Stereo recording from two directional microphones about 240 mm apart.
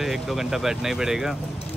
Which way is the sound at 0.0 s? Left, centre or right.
Centre.